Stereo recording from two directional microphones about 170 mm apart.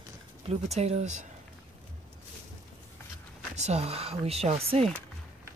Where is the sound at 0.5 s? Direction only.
40° right (ahead or behind).